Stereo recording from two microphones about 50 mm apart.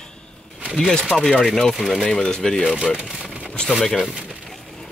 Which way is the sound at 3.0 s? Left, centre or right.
Centre.